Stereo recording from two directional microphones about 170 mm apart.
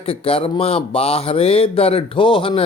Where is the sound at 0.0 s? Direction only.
35° left (ahead or behind).